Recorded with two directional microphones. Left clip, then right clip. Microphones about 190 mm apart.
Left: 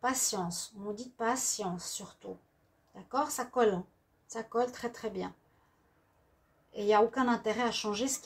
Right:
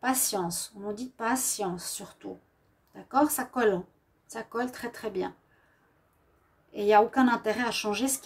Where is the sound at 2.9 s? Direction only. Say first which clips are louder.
Right 7 dB; 50° right (ahead or behind).